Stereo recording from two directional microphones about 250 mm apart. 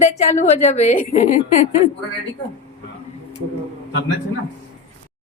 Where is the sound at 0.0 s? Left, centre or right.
Left.